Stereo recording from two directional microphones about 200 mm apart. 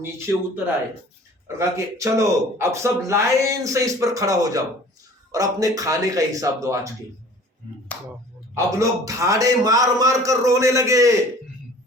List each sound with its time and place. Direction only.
0.0 s speech: 10° right (ahead or behind)
8.5 s speech: 15° right (ahead or behind)